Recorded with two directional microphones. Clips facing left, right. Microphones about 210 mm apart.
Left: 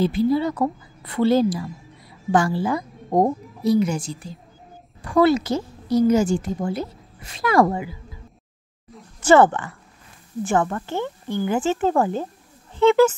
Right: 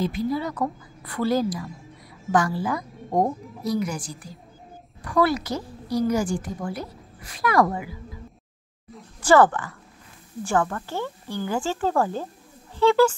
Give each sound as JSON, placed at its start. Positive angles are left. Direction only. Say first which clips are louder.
{"t": 0.0, "sound": "a woman's voice", "louder": "left 6 dB", "side_deg": 30}
{"t": 9.2, "sound": "a woman's voice", "louder": "left 2 dB", "side_deg": 25}